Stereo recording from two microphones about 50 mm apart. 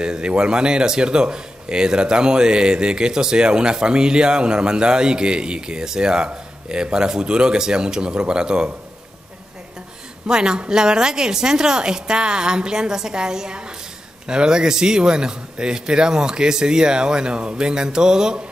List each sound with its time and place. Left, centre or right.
0.0 s speech: centre
10.2 s speech: centre